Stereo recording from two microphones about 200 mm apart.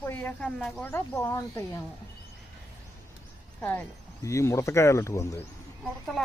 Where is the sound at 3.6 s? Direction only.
10° left (ahead or behind).